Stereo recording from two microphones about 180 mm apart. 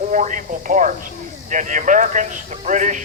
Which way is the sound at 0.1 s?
45° right (ahead or behind).